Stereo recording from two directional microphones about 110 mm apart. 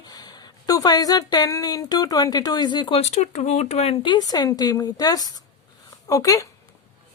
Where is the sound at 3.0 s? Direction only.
90° left; by 3.9 s 75° left (ahead or behind).